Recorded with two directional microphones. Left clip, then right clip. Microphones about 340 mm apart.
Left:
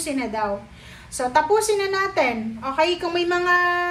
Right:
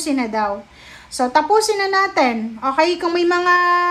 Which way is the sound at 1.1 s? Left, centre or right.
Centre.